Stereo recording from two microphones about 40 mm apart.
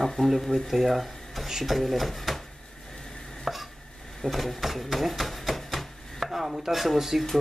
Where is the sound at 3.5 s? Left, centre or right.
Centre.